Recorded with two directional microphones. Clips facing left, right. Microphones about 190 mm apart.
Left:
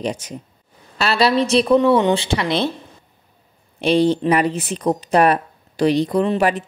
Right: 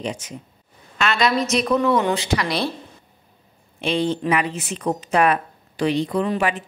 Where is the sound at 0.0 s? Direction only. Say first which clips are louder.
Left 4 dB; 35° left (ahead or behind).